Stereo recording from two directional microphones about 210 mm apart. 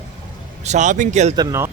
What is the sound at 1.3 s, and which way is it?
Speech, 15° right (ahead or behind).